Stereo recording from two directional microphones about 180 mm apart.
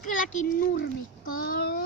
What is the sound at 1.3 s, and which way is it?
Child singing, 55° left (ahead or behind).